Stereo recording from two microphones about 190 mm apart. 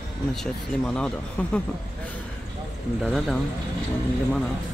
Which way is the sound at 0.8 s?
5° left (ahead or behind).